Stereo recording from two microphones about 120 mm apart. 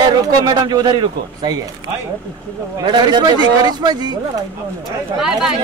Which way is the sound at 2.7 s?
35° right (ahead or behind).